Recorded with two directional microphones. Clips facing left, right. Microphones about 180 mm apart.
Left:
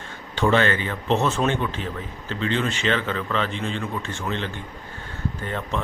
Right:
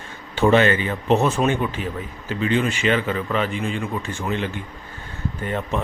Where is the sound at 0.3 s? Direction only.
15° right (ahead or behind).